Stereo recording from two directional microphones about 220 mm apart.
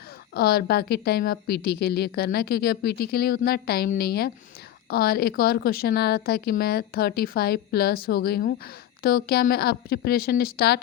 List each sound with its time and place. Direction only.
0.3 s a woman's voice: 45° left (ahead or behind)